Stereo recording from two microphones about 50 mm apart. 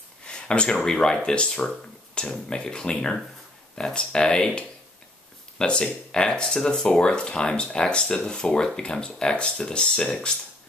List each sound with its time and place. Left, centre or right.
0.3 s speech: centre
5.6 s speech: centre